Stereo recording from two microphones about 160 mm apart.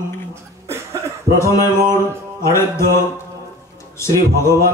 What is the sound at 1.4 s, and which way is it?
A man's voice, 20° left (ahead or behind).